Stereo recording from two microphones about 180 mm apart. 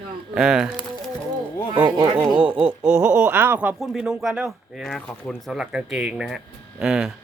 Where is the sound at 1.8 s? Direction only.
25° right (ahead or behind).